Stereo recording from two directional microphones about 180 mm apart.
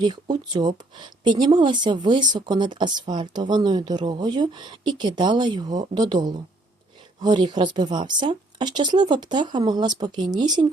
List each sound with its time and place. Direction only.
0.0 s speech: 25° right (ahead or behind)